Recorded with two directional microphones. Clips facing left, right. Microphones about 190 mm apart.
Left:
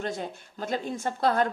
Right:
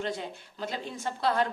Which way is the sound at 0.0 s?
45° left (ahead or behind).